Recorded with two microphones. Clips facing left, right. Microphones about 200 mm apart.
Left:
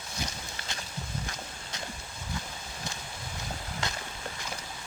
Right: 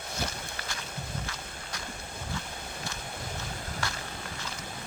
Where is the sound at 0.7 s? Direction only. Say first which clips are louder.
Left 3 dB; 20° left (ahead or behind).